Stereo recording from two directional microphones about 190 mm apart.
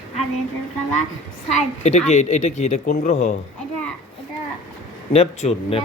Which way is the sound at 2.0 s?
35° left (ahead or behind).